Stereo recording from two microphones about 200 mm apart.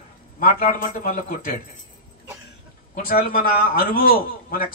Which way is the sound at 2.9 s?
45° left (ahead or behind).